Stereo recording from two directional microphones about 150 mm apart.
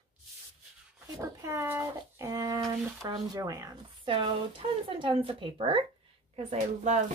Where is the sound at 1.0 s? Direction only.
20° right (ahead or behind).